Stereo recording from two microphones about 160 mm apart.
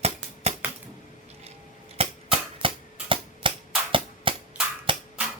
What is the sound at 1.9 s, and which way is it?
Typewriter, 35° right (ahead or behind).